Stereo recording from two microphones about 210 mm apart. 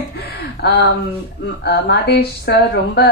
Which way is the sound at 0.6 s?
50° left (ahead or behind).